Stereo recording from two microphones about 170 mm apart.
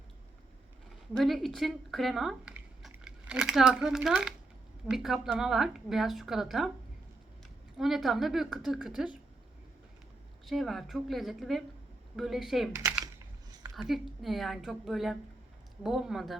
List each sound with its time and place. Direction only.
1.1 s speech: centre (ahead or behind)
7.8 s speech: centre (ahead or behind)
10.4 s speech: centre (ahead or behind)
13.8 s speech: centre (ahead or behind)